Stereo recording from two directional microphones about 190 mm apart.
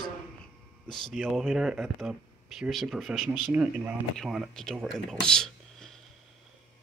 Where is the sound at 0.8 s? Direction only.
5° left (ahead or behind).